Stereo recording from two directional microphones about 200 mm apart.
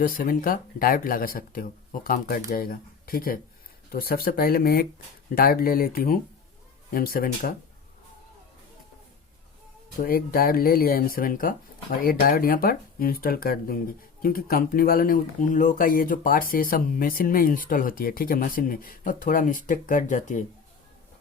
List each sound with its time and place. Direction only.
0.0 s speech: 45° left (ahead or behind)
10.0 s speech: 50° left (ahead or behind)